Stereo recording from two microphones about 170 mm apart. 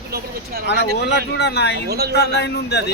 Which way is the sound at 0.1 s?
65° right (ahead or behind).